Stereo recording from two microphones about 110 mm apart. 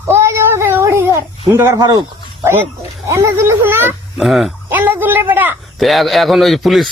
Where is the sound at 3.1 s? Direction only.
25° right (ahead or behind).